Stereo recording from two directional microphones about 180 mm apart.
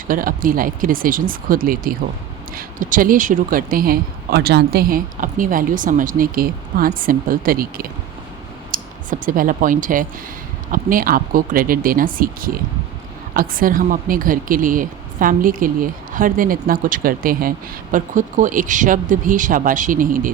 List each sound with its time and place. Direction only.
0.1 s speech: 50° right (ahead or behind)
8.7 s a sound: 50° right (ahead or behind)
10.7 s speech: 50° right (ahead or behind)